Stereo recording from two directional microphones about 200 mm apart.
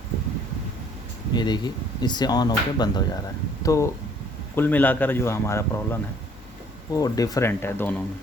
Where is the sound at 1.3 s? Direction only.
20° left (ahead or behind).